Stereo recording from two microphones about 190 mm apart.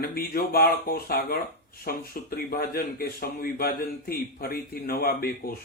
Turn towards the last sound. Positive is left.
turn(degrees=50)  # may be behind; listen again after turning